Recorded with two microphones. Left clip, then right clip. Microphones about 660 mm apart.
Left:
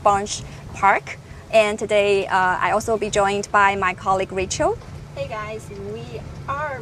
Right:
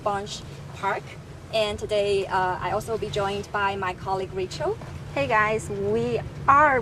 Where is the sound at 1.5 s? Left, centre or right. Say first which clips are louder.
Left 7 dB; left.